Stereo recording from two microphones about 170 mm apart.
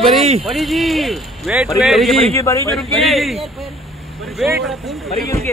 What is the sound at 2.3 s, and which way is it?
Speech, 15° left (ahead or behind).